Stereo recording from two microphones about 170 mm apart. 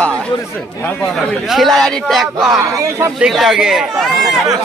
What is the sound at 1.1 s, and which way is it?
A man's voice, centre (ahead or behind).